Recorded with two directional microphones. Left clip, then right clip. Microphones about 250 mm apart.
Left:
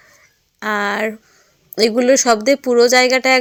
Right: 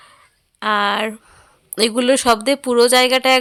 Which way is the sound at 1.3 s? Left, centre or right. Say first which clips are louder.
Right 6 dB; centre.